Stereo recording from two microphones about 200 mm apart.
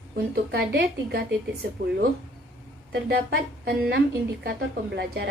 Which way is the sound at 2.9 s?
55° right (ahead or behind).